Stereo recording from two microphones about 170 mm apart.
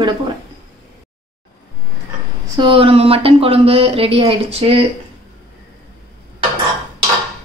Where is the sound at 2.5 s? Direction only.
30° right (ahead or behind).